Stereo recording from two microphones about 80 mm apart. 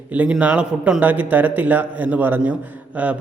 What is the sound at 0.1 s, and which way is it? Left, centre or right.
A man's voice, centre.